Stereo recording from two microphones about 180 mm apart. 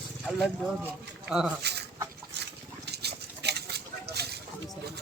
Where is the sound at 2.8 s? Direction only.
65° right (ahead or behind).